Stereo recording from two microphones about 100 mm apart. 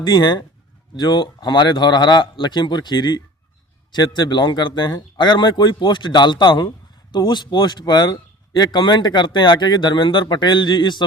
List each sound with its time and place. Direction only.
0.0 s speech: 50° left (ahead or behind)